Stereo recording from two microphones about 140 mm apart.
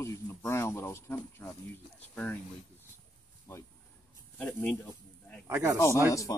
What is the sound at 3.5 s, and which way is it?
Speech, 20° left (ahead or behind).